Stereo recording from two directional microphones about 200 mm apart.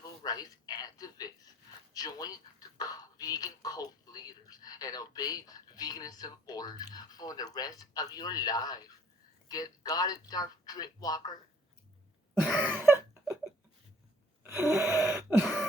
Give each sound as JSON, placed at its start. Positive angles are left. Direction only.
{"t": 0.2, "sound": "a man's voice", "side_deg": 20}
{"t": 12.4, "sound": "a sound", "side_deg": -5}
{"t": 14.4, "sound": "gasp", "side_deg": -15}